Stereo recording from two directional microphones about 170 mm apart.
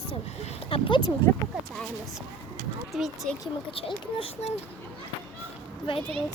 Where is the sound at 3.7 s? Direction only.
30° left (ahead or behind).